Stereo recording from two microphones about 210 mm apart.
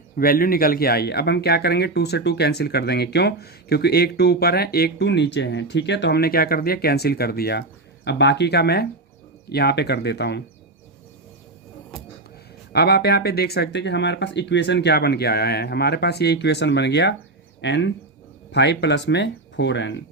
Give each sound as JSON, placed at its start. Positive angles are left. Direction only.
{"t": 0.2, "sound": "speech", "side_deg": 45}
{"t": 12.7, "sound": "speech", "side_deg": 50}